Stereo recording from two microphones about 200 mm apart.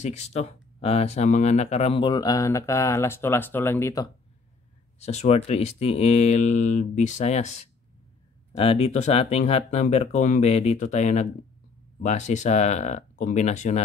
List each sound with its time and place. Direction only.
0.0 s speech: 35° left (ahead or behind); by 4.1 s 15° left (ahead or behind)
4.9 s speech: 35° left (ahead or behind)